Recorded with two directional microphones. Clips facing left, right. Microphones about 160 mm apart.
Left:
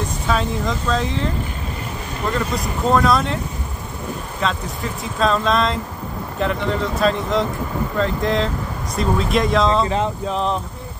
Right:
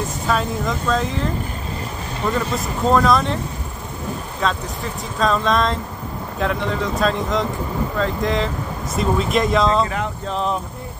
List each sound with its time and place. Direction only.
0.3 s speech: centre (ahead or behind)
2.3 s speech: centre (ahead or behind)
5.2 s speech: centre (ahead or behind)
9.8 s speech: 25° left (ahead or behind)
10.2 s speech: centre (ahead or behind)